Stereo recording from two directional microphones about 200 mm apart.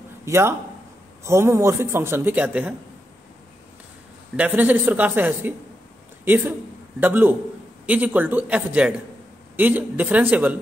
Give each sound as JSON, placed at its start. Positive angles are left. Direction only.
{"t": 0.2, "sound": "speech", "side_deg": -15}
{"t": 4.4, "sound": "speech", "side_deg": -10}